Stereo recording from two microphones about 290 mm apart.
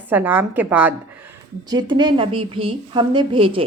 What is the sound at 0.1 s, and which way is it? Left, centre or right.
A woman's voice, centre.